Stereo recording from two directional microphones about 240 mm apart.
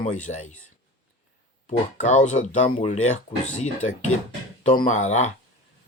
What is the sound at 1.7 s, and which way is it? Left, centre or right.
Speech, left.